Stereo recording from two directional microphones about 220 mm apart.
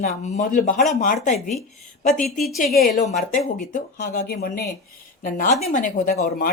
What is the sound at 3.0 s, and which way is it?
Speech, 35° left (ahead or behind).